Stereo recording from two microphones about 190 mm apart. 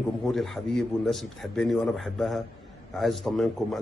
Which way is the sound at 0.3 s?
Centre (ahead or behind).